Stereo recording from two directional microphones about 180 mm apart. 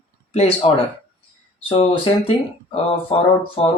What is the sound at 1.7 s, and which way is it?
Speech, 30° left (ahead or behind).